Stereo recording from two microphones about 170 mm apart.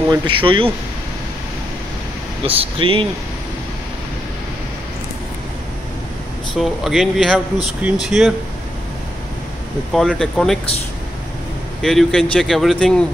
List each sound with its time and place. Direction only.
0.1 s speech: 30° right (ahead or behind)
2.4 s speech: 35° right (ahead or behind)
6.6 s speech: centre (ahead or behind)
9.9 s speech: 5° left (ahead or behind)
11.8 s speech: centre (ahead or behind)